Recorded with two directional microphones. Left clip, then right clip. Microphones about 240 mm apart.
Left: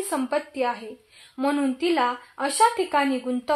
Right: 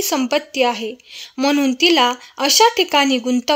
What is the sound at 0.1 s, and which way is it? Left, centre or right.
A woman's voice, right.